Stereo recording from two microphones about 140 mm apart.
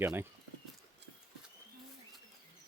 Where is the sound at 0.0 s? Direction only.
15° right (ahead or behind).